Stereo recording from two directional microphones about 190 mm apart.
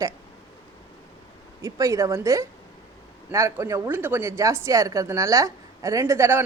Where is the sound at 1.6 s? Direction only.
15° right (ahead or behind).